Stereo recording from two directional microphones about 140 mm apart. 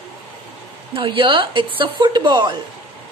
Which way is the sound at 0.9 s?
40° right (ahead or behind).